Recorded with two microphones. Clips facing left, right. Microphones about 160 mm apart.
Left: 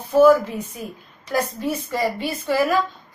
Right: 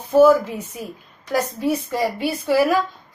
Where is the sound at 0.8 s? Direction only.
10° right (ahead or behind).